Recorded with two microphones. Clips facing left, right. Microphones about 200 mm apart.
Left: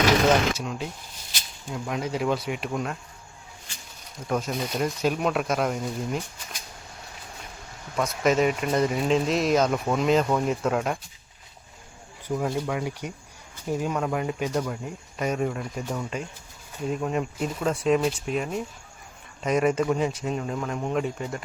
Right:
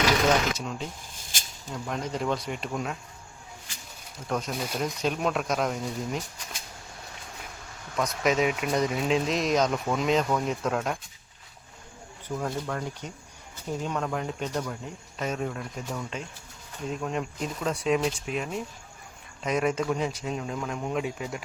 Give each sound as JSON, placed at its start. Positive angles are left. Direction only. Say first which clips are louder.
{"t": 0.5, "sound": "speech", "louder": "left 2 dB", "side_deg": 0}
{"t": 1.1, "sound": "a sound", "louder": "even", "side_deg": -50}
{"t": 1.7, "sound": "speech", "louder": "left 3 dB", "side_deg": 5}
{"t": 4.3, "sound": "speech", "louder": "left 3 dB", "side_deg": 5}
{"t": 7.9, "sound": "speech", "louder": "left 3 dB", "side_deg": 0}
{"t": 12.4, "sound": "speech", "louder": "left 3 dB", "side_deg": 5}